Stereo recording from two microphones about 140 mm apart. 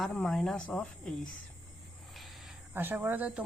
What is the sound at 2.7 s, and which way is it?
Speech, 15° right (ahead or behind).